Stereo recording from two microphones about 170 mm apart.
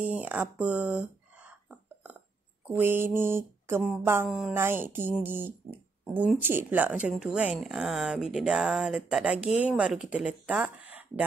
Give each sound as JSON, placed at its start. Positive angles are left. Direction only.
{"t": 0.0, "sound": "a sound", "side_deg": -10}
{"t": 2.7, "sound": "mantra", "side_deg": -10}
{"t": 3.9, "sound": "speech", "side_deg": -15}